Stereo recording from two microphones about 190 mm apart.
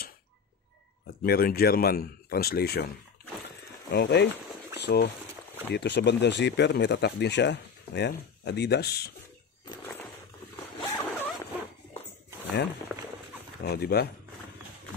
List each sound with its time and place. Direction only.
1.2 s speech: 55° left (ahead or behind)
3.9 s speech: 55° left (ahead or behind)
10.5 s zipper: 15° left (ahead or behind)
12.9 s run: 5° right (ahead or behind)
13.7 s speech: 55° left (ahead or behind)